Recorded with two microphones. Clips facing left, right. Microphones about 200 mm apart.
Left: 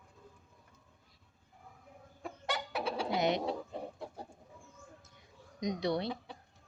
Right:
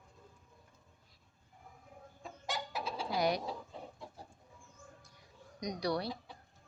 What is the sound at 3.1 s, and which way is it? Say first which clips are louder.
Bird: left 1 dB; 20° left (ahead or behind).